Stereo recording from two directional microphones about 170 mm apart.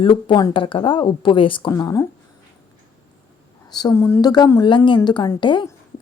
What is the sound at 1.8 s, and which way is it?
Speech, 20° left (ahead or behind).